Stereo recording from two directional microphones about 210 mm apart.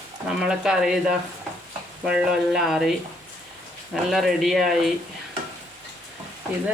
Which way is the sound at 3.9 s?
Centre (ahead or behind).